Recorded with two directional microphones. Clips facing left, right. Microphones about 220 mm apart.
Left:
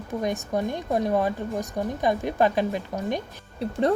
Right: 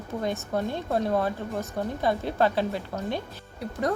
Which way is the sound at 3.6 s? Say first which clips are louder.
Left 5 dB; 30° left (ahead or behind).